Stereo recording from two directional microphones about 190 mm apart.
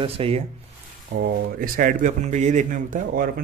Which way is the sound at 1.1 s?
50° right (ahead or behind).